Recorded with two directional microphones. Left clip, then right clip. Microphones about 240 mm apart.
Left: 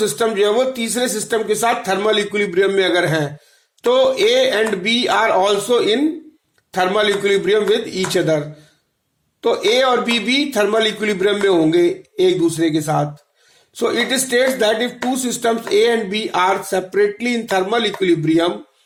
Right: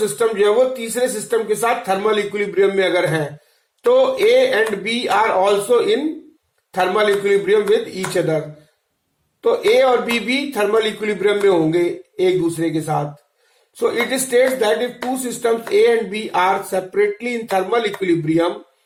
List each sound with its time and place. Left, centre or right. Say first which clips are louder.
0.2 s a man's voice: right 2 dB; left
9.4 s a man's voice: right 1 dB; left